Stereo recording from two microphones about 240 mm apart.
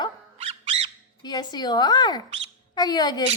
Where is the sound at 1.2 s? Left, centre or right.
Centre.